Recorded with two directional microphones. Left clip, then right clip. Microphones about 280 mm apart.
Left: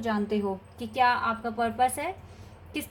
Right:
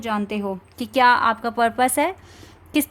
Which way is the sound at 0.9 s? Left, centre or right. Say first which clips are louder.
Right 8 dB; right.